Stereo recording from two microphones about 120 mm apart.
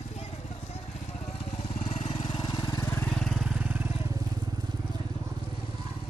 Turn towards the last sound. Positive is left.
turn(degrees=-25)  # may be behind; listen again after turning